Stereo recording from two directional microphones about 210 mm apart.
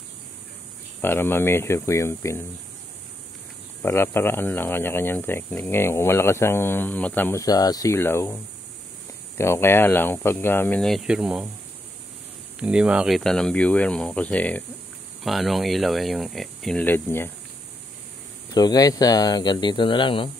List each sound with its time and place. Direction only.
1.0 s speech: 10° left (ahead or behind)
3.8 s speech: 10° left (ahead or behind)
9.4 s speech: 10° left (ahead or behind)
12.5 s speech: 5° right (ahead or behind)
18.5 s speech: 20° left (ahead or behind)